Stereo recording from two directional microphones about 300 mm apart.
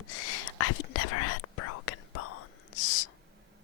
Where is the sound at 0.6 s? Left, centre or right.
Left.